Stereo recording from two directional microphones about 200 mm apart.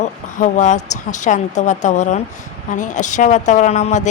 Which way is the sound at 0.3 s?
40° left (ahead or behind).